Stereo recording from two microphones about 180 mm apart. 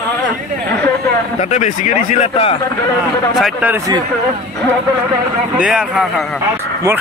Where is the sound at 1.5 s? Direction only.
45° left (ahead or behind).